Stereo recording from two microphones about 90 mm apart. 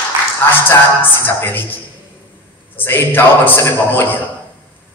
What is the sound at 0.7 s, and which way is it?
Speech, 25° left (ahead or behind).